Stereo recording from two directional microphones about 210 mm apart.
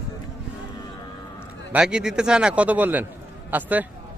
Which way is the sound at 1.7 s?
5° right (ahead or behind).